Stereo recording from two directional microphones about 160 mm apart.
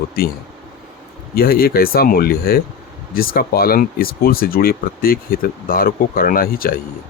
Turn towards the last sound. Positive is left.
turn(degrees=65)  # may be behind; listen again after turning